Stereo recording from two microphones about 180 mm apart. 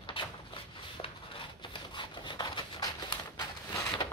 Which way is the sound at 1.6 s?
25° left (ahead or behind).